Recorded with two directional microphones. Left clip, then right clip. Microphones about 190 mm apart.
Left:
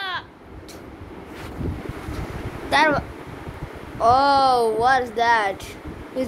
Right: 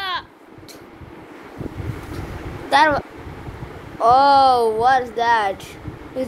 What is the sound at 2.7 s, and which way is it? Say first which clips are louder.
A woman's voice: right 3 dB; 5° right (ahead or behind).